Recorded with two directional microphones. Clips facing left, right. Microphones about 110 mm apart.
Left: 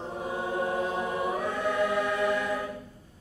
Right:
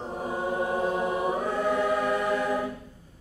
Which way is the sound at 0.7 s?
25° right (ahead or behind).